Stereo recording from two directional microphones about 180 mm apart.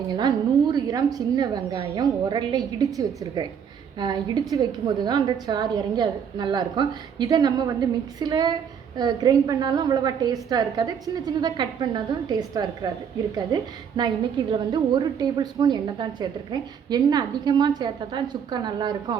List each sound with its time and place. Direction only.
0.2 s a woman's voice: 25° right (ahead or behind)